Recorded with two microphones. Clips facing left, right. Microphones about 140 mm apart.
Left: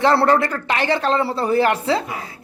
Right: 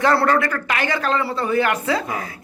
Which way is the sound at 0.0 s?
25° left (ahead or behind).